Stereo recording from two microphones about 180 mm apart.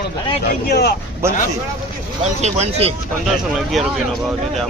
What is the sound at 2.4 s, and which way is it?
Speech, 35° right (ahead or behind).